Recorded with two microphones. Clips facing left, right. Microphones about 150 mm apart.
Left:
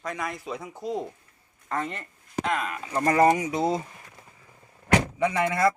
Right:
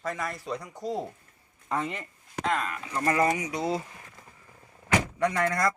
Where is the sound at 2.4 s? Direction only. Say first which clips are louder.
Even; 15° left (ahead or behind).